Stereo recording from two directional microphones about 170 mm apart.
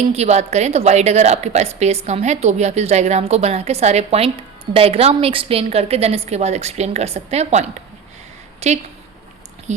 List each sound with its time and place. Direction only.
0.1 s a woman's voice: 40° right (ahead or behind)
8.6 s a woman's voice: 40° right (ahead or behind)